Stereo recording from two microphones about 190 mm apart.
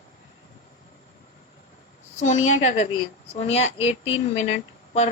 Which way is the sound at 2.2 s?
40° left (ahead or behind).